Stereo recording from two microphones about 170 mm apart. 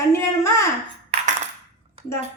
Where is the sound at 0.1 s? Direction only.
15° left (ahead or behind).